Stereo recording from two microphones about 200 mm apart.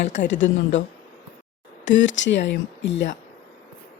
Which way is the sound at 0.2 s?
65° left (ahead or behind).